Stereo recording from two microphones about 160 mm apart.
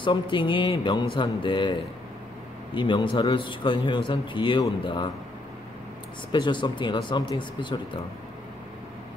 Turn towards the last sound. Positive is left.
turn(degrees=30)  # may be behind; listen again after turning